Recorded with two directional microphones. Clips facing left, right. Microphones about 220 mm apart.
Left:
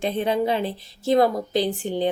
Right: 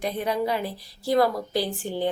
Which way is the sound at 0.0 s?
25° left (ahead or behind).